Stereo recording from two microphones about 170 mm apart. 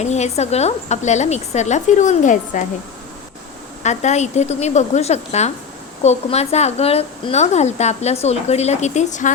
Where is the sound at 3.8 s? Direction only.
40° left (ahead or behind).